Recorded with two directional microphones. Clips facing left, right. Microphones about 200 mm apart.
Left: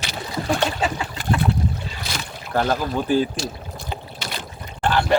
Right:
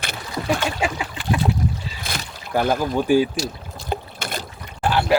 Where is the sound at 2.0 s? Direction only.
55° right (ahead or behind).